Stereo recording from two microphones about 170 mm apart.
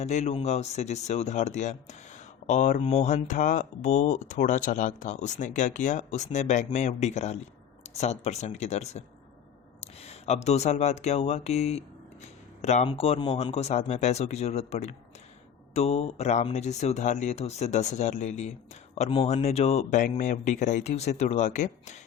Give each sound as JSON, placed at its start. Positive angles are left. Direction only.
{"t": 0.0, "sound": "speech", "side_deg": 40}
{"t": 12.2, "sound": "a sound", "side_deg": 40}
{"t": 12.9, "sound": "speech", "side_deg": 30}
{"t": 20.0, "sound": "speech", "side_deg": 50}